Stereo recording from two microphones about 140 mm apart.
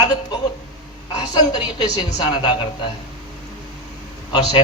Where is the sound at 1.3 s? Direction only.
30° left (ahead or behind).